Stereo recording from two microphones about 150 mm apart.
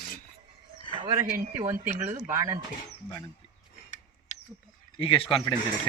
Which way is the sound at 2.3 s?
25° right (ahead or behind).